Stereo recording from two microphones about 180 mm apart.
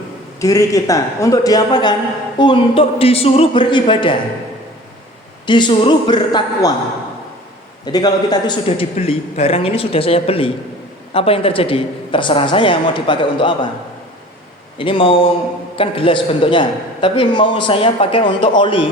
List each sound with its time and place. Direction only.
0.3 s a man's voice: 20° left (ahead or behind)
5.5 s a man's voice: 25° left (ahead or behind)
7.9 s a man's voice: 20° left (ahead or behind)
14.8 s a man's voice: 30° left (ahead or behind)